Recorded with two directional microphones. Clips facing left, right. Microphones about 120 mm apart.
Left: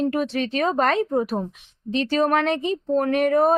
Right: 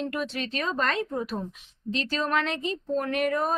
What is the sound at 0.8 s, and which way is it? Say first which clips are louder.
Speech: left 7 dB; 60° left (ahead or behind).